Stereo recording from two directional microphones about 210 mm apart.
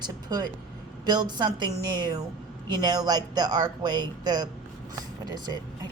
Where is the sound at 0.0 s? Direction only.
20° right (ahead or behind).